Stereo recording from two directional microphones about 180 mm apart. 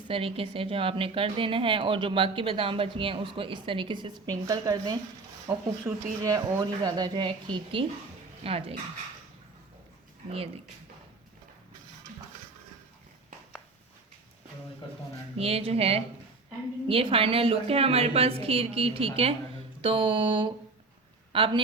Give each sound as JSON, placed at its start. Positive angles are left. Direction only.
{"t": 0.1, "sound": "a woman's voice", "side_deg": -30}
{"t": 10.2, "sound": "a woman's voice", "side_deg": -30}
{"t": 15.4, "sound": "a woman's voice", "side_deg": -35}